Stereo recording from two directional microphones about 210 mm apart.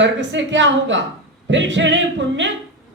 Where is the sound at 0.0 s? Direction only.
60° right (ahead or behind).